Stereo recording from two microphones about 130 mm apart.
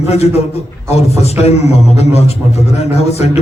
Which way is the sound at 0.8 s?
55° left (ahead or behind).